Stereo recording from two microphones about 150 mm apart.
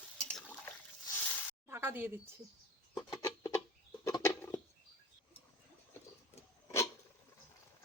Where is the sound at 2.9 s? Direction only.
25° left (ahead or behind).